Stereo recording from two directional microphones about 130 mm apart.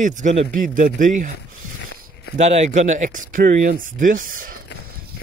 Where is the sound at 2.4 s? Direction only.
60° right (ahead or behind); by 4.5 s 90° right.